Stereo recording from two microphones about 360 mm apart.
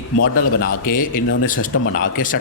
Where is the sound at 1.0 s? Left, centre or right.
Left.